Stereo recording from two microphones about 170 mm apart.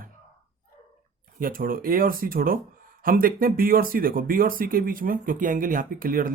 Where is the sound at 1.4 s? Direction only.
55° right (ahead or behind).